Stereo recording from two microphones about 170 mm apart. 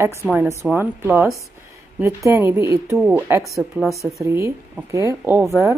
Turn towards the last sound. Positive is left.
turn(degrees=-15)  # may be behind; listen again after turning